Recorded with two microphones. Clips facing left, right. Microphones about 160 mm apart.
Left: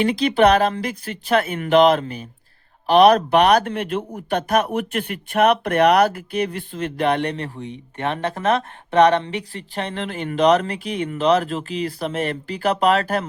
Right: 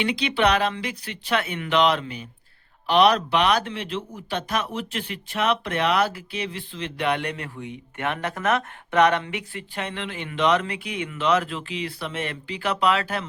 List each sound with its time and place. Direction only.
0.0 s speech: 45° left (ahead or behind)